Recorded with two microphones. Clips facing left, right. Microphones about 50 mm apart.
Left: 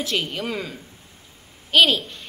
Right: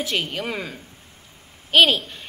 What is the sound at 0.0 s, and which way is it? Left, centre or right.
A woman's voice, centre.